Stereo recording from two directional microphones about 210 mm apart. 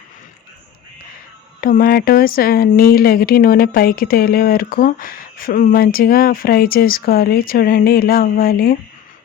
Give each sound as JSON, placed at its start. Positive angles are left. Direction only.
{"t": 1.6, "sound": "speech", "side_deg": 45}